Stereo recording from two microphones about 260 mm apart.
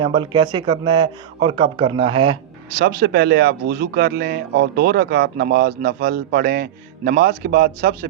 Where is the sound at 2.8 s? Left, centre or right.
Right.